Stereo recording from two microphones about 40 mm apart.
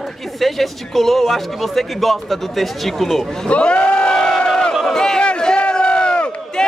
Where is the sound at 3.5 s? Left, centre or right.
Left.